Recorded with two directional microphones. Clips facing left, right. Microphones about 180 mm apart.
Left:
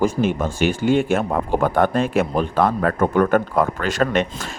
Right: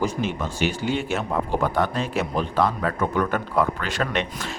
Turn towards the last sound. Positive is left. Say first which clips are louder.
# left 6 dB
turn(degrees=45)  # may be behind; listen again after turning